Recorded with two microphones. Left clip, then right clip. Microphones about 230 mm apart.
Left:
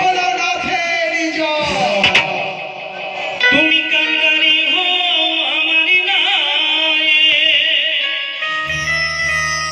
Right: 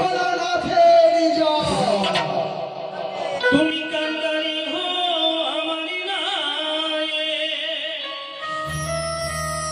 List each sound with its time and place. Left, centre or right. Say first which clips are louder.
3.4 s music: left 8 dB; left